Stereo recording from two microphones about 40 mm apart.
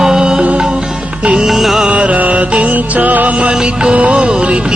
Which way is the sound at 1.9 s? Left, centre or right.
Right.